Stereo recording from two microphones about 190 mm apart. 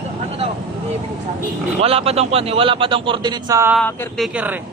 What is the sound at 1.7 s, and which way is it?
A man's voice, 30° right (ahead or behind).